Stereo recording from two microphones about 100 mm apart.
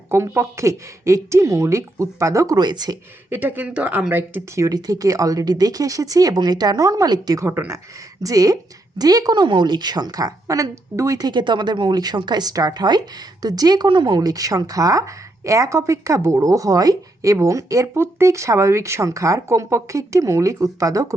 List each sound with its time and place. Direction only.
0.1 s speech: 25° right (ahead or behind)
2.6 s a woman's voice: 45° right (ahead or behind)
3.2 s speech: 20° right (ahead or behind)
4.6 s speech: 35° right (ahead or behind)
7.4 s speech: 25° right (ahead or behind)
8.2 s speech: 35° right (ahead or behind)
11.3 s a woman's voice: 50° right (ahead or behind)